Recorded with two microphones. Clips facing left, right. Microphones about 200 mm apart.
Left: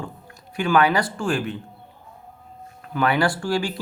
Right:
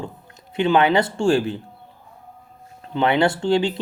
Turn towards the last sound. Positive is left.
turn(degrees=-25)  # may be behind; listen again after turning